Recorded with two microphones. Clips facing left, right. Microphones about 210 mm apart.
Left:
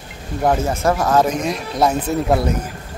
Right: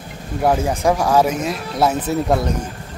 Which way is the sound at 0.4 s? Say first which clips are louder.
Even; 10° right (ahead or behind).